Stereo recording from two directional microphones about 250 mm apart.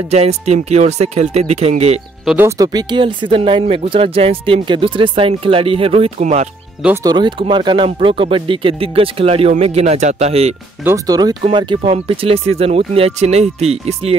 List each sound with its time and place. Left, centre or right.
0.1 s speech: right
2.2 s speech: centre; by 6.5 s right
6.8 s speech: centre
10.8 s speech: centre